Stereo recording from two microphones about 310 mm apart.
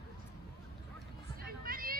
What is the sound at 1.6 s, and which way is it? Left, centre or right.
Vehicle, right.